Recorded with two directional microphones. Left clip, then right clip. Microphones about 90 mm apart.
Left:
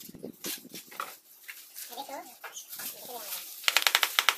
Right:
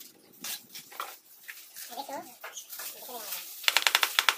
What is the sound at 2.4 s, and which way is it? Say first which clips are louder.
Dog: even; 35° right (ahead or behind).